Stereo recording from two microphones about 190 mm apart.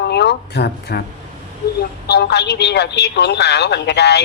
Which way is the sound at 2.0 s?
60° left (ahead or behind).